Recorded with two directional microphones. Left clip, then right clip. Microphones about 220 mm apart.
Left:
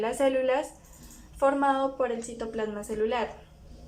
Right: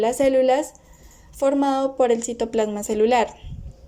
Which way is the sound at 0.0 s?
20° right (ahead or behind).